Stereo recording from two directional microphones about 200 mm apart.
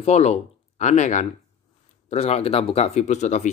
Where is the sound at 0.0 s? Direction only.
35° left (ahead or behind).